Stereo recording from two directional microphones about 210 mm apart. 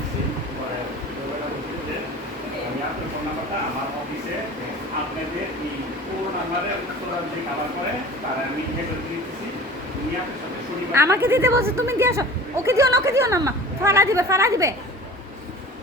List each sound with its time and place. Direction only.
10.9 s a woman's voice: 10° right (ahead or behind)